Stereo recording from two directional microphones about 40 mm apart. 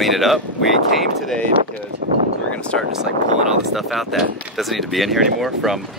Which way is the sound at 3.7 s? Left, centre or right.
Centre.